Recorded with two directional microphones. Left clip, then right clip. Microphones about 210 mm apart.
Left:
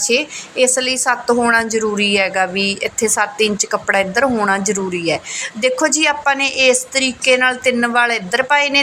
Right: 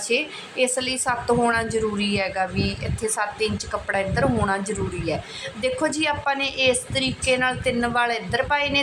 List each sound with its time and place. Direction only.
0.0 s a woman's voice: 20° left (ahead or behind)